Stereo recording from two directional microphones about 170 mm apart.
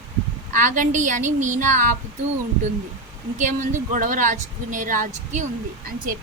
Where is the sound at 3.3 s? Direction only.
50° right (ahead or behind).